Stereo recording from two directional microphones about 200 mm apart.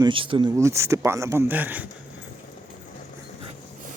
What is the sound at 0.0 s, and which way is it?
Speech, 25° right (ahead or behind).